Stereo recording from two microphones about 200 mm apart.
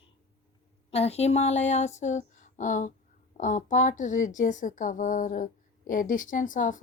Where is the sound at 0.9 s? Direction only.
30° left (ahead or behind).